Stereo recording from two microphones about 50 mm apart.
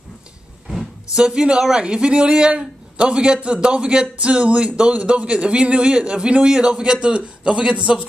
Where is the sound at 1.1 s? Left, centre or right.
Centre.